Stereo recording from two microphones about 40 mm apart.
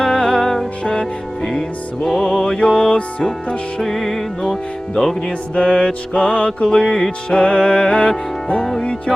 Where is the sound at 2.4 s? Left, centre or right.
Left.